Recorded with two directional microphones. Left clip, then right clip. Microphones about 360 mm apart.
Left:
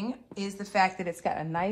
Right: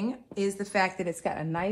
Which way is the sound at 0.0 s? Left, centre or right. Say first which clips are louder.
Right 6 dB; centre.